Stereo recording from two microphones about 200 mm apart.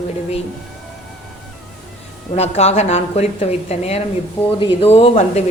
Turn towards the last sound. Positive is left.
turn(degrees=30)  # may be behind; listen again after turning